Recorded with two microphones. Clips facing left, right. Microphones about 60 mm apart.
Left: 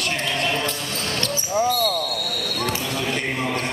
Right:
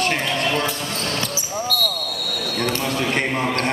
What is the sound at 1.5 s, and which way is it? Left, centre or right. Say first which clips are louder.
Basketball bounce: left 5 dB; centre.